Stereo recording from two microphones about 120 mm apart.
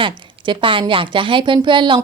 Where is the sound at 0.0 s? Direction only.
45° right (ahead or behind).